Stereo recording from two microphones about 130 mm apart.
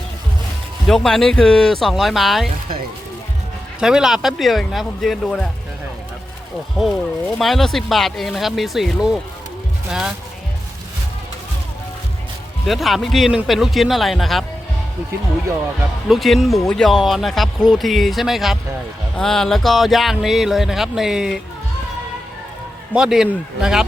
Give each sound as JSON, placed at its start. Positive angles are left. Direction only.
{"t": 0.9, "sound": "speech", "side_deg": 5}
{"t": 3.8, "sound": "speech", "side_deg": -5}
{"t": 6.7, "sound": "speech", "side_deg": 0}
{"t": 12.6, "sound": "speech", "side_deg": 0}
{"t": 16.0, "sound": "speech", "side_deg": 0}
{"t": 23.0, "sound": "speech", "side_deg": -5}